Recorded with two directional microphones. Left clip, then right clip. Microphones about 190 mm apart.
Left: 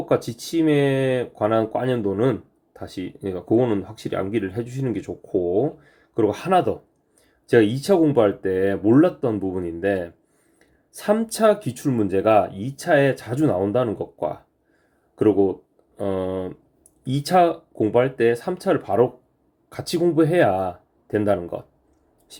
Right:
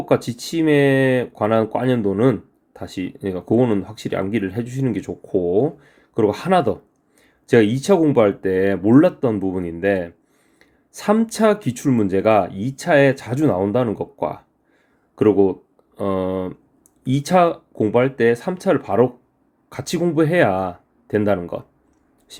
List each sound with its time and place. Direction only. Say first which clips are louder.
0.0 s speech: right 3 dB; 25° right (ahead or behind)